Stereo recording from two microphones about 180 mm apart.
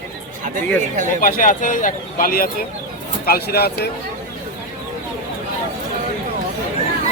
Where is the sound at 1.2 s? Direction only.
50° left (ahead or behind).